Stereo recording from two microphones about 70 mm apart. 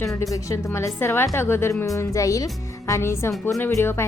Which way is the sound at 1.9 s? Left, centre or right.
Left.